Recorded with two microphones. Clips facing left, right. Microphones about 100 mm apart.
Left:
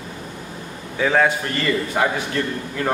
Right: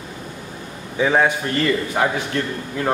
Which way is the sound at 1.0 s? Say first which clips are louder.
Right 1 dB; 15° right (ahead or behind).